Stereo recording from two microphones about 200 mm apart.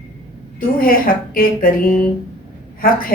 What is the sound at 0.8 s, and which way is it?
Speech, 45° left (ahead or behind).